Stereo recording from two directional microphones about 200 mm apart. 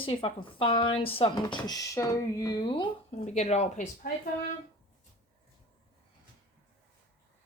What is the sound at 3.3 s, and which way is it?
Speech, 35° left (ahead or behind).